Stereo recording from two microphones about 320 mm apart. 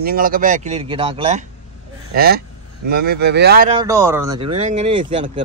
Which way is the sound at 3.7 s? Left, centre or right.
Centre.